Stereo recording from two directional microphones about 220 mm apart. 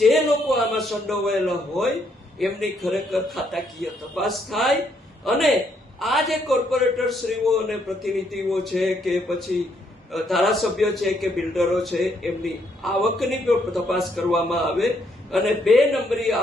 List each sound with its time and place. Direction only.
0.0 s a man's voice: centre (ahead or behind)